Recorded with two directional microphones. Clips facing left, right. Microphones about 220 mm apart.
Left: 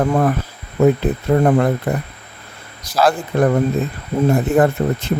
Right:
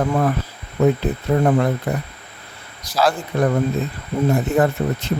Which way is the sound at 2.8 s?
50° left (ahead or behind).